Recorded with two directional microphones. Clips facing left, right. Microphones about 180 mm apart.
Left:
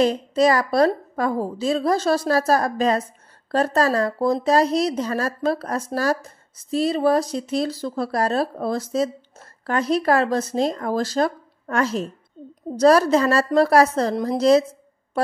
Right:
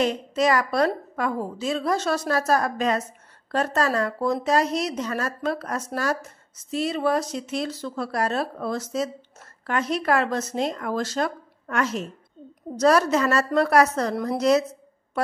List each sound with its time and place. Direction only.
0.0 s speech: 35° left (ahead or behind)